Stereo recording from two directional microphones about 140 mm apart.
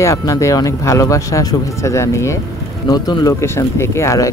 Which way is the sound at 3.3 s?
20° left (ahead or behind).